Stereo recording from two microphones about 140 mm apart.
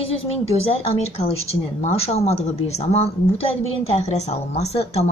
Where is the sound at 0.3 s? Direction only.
45° left (ahead or behind).